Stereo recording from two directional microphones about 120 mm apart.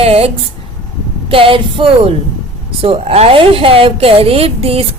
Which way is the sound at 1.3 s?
45° right (ahead or behind).